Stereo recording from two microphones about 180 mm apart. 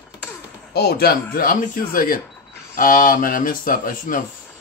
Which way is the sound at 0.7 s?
60° left (ahead or behind).